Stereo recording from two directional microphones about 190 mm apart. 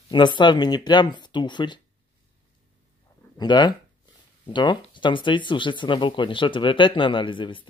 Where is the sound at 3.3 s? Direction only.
20° left (ahead or behind).